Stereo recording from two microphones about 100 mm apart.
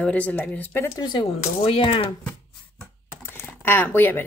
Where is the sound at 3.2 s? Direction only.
20° left (ahead or behind).